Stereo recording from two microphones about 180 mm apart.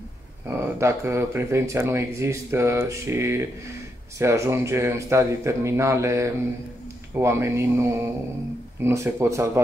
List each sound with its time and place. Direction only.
0.5 s speech: 15° right (ahead or behind)